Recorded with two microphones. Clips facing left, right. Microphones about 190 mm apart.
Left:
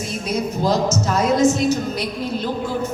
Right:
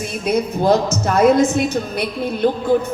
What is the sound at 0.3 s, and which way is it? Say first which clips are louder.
A woman's voice: right 5 dB; 60° right (ahead or behind).